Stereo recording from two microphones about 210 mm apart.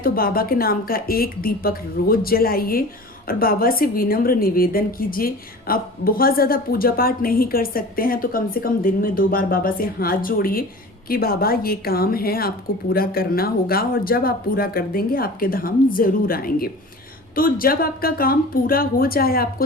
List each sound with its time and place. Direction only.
0.0 s a woman's voice: 45° left (ahead or behind)